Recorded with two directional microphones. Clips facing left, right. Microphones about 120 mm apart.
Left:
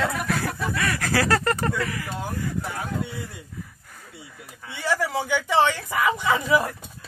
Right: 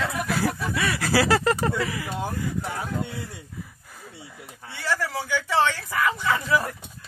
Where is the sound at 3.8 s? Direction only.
10° right (ahead or behind).